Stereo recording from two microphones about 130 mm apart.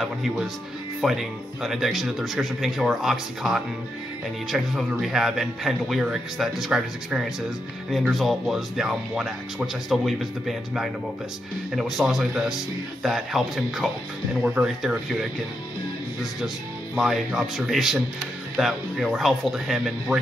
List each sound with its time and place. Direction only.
0.0 s speech: centre (ahead or behind)
16.9 s speech: 5° right (ahead or behind)